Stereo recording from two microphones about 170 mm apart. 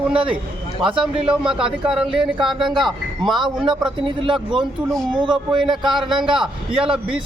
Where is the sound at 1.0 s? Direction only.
5° right (ahead or behind).